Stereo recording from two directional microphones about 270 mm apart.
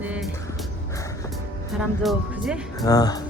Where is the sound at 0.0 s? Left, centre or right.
Centre.